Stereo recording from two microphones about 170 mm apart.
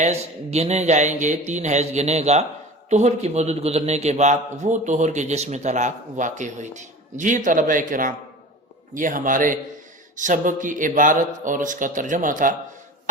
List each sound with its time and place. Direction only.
0.0 s a man's voice: 40° right (ahead or behind)